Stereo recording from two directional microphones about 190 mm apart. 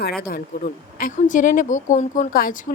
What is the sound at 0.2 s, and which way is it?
Speech, 50° left (ahead or behind).